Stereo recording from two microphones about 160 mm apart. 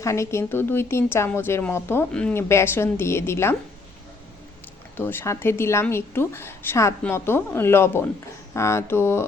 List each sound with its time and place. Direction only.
0.0 s a woman's voice: 20° left (ahead or behind)
4.9 s a woman's voice: 15° left (ahead or behind)